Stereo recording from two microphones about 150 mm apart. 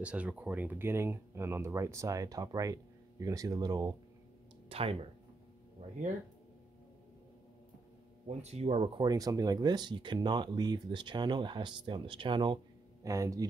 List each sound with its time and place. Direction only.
0.0 s speech: 10° right (ahead or behind); by 3.9 s 25° right (ahead or behind)
4.6 s speech: 40° right (ahead or behind)
8.3 s speech: 45° right (ahead or behind)
13.0 s speech: 20° right (ahead or behind)